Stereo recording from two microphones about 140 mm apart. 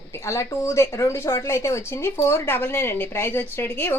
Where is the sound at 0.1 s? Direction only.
20° left (ahead or behind).